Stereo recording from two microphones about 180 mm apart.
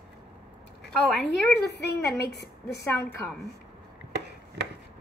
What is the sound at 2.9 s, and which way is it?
Speech, 10° left (ahead or behind).